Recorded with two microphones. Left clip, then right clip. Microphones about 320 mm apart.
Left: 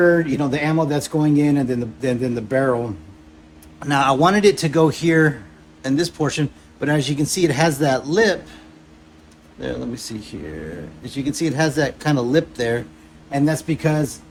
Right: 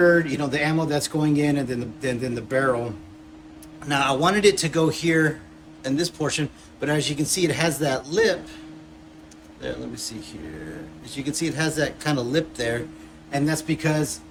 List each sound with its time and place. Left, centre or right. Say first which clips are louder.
0.0 s speech: left 2 dB; centre
3.8 s speech: left 5 dB; left
9.6 s speech: left 4 dB; centre